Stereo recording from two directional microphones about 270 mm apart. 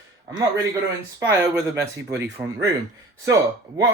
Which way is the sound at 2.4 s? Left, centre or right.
Centre.